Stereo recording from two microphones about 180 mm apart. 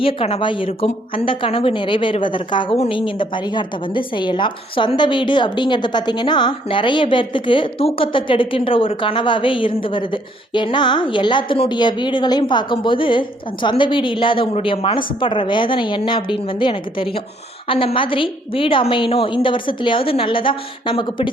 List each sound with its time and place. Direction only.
0.0 s a woman's voice: 30° left (ahead or behind)